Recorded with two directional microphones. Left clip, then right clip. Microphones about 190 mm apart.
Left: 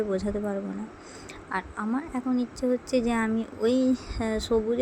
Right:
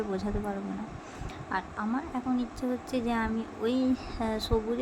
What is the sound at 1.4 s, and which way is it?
A woman's voice, 15° left (ahead or behind).